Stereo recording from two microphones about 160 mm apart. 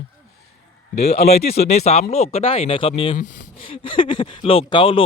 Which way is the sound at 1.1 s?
40° left (ahead or behind).